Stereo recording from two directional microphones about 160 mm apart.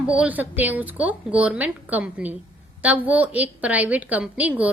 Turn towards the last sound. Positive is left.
turn(degrees=-10)  # may be behind; listen again after turning